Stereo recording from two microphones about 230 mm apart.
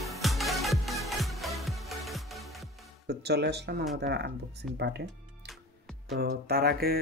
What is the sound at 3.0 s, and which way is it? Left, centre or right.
Speech, right.